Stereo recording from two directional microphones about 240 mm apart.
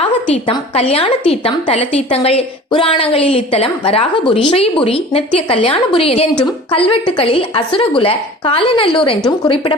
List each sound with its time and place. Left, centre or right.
0.4 s a woman's voice: left